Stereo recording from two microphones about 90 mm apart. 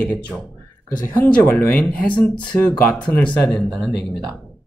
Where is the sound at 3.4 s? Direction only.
5° left (ahead or behind).